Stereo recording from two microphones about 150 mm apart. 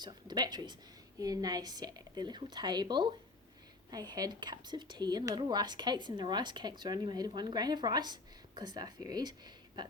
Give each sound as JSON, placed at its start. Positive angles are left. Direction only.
{"t": 0.0, "sound": "speech", "side_deg": -30}